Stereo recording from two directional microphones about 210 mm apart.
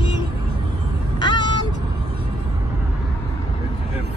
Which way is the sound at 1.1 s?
20° left (ahead or behind).